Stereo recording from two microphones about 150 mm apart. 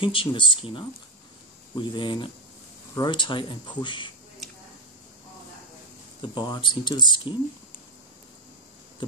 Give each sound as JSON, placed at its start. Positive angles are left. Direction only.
{"t": 0.0, "sound": "speech", "side_deg": 35}
{"t": 6.2, "sound": "speech", "side_deg": 30}